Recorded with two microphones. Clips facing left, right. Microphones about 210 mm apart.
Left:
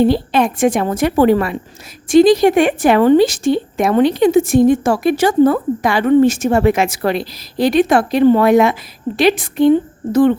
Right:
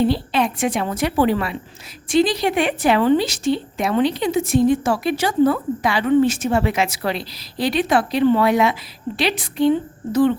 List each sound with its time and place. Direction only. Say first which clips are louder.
0.0 s a woman's voice: left 5 dB; 50° left (ahead or behind)